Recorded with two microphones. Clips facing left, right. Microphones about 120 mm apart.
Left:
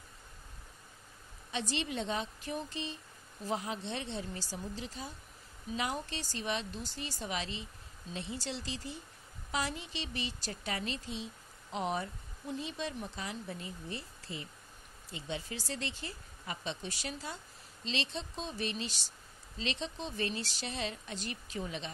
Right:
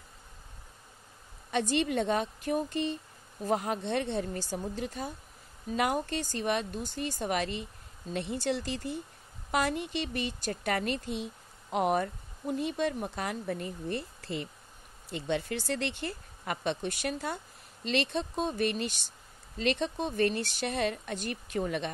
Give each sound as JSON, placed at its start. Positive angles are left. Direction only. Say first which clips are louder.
{"t": 1.5, "sound": "speech", "louder": "right 8 dB", "side_deg": -55}